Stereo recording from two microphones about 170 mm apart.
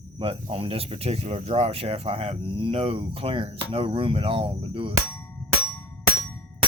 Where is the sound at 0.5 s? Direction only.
35° right (ahead or behind).